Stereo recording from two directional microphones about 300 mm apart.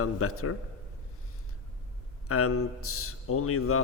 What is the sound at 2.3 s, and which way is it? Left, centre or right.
Speech, left.